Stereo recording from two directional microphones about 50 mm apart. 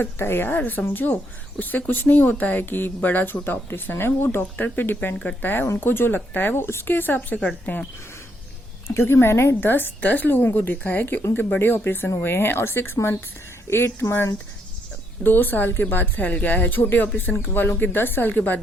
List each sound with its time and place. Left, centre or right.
0.0 s a woman's voice: left
3.7 s a woman's voice: left
8.9 s a woman's voice: left
15.2 s speech: left